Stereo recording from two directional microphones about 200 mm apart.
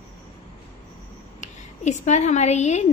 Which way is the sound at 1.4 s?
35° left (ahead or behind).